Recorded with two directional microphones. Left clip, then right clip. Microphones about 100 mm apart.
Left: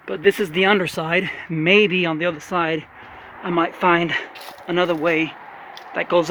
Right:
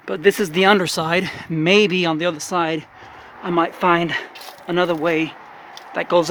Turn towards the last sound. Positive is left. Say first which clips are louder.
# right 1 dB
turn(degrees=-35)  # may be behind; listen again after turning